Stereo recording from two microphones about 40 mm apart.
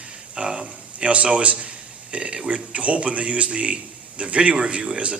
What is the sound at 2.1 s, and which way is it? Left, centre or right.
A man's voice, right.